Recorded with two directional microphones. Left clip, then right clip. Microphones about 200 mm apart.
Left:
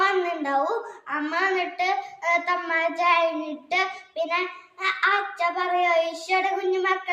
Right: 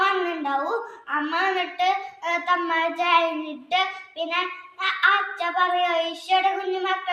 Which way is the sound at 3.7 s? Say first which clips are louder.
Right 2 dB; 20° left (ahead or behind).